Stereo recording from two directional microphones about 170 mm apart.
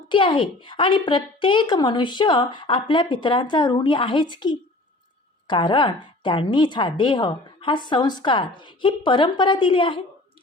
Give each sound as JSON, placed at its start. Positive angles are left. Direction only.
{"t": 0.1, "sound": "a woman's voice", "side_deg": 30}